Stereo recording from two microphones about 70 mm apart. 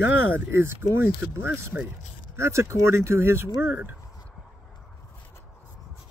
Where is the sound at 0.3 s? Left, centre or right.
Right.